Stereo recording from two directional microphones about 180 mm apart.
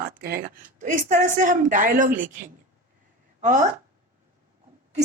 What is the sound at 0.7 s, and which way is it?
A woman's voice, 45° right (ahead or behind).